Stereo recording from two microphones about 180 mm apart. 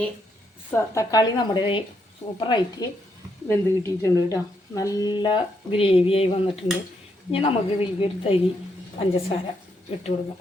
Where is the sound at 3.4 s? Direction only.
15° left (ahead or behind); by 7.5 s 30° left (ahead or behind).